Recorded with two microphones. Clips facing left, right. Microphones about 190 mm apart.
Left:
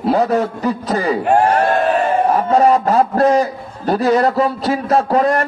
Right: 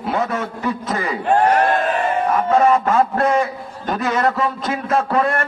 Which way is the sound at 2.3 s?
35° left (ahead or behind).